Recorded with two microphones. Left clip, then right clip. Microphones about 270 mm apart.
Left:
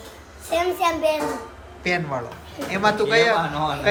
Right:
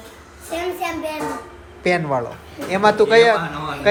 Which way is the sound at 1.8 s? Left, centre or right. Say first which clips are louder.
Right 5 dB; centre.